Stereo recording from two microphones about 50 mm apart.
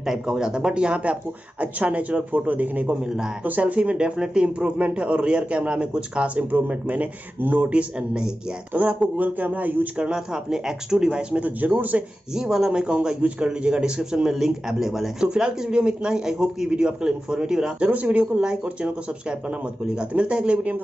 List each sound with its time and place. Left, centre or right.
0.0 s a man's voice: centre
8.8 s a man's voice: right
9.9 s a man's voice: centre
11.4 s a man's voice: right
12.4 s a man's voice: centre
15.2 s a man's voice: centre
17.7 s speech: right
20.0 s speech: right